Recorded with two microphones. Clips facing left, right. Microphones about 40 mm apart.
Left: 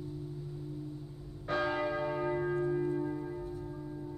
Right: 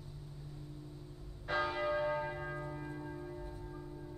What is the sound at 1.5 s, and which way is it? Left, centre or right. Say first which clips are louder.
Church bell: left 2 dB; centre.